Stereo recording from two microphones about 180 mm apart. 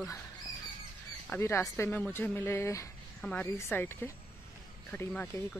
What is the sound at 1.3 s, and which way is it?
Speech, 15° left (ahead or behind).